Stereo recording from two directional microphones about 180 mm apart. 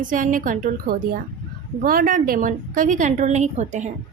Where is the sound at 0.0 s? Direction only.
45° right (ahead or behind).